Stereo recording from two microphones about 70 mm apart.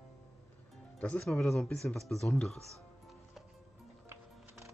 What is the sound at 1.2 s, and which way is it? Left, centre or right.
Speech, centre.